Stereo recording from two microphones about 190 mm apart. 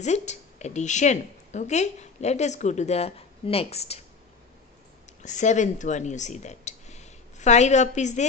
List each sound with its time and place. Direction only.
0.0 s a woman's voice: 35° left (ahead or behind)
5.2 s speech: 40° left (ahead or behind)